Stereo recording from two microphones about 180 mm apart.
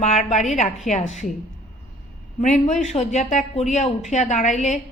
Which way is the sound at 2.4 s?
45° left (ahead or behind).